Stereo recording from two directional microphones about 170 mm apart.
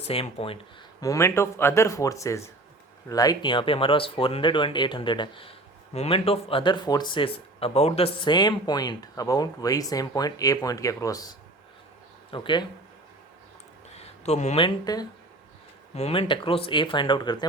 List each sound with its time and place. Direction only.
0.0 s speech: 35° left (ahead or behind)
1.0 s speech: 20° left (ahead or behind)
13.9 s a sound: 40° left (ahead or behind)
14.9 s speech: 20° left (ahead or behind)
16.0 s speech: 35° left (ahead or behind)